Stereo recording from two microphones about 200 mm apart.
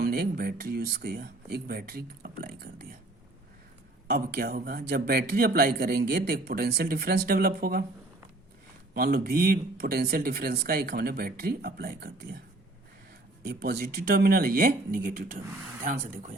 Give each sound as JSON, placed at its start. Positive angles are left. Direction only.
{"t": 0.0, "sound": "speech", "side_deg": -50}
{"t": 4.1, "sound": "speech", "side_deg": -50}
{"t": 9.0, "sound": "speech", "side_deg": -50}
{"t": 13.4, "sound": "speech", "side_deg": -50}